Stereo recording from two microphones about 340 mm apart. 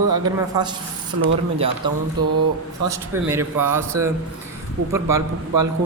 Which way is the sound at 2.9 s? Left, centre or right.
Centre.